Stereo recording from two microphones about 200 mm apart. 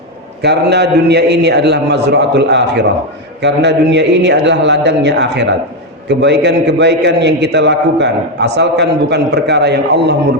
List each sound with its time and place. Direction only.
0.4 s a man's voice: 55° right (ahead or behind)